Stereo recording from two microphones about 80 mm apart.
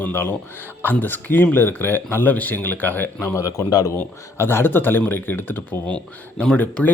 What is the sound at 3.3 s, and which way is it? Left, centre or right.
Speech, left.